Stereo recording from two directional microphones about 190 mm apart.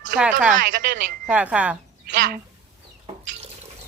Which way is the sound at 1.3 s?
5° right (ahead or behind).